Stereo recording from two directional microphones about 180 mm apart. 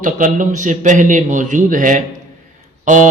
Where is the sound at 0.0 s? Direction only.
45° right (ahead or behind).